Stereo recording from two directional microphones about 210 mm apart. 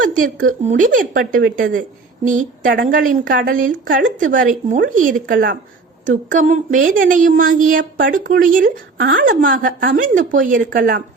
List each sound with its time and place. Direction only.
0.0 s a woman's voice: 40° right (ahead or behind)